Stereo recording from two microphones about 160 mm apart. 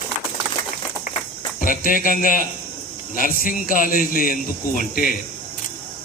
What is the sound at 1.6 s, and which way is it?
A man's voice, 60° left (ahead or behind).